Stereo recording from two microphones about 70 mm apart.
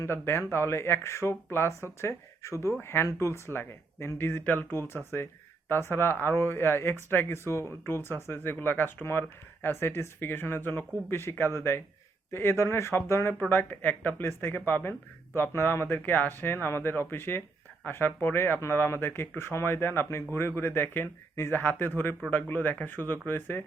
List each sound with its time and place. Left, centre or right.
0.0 s speech: left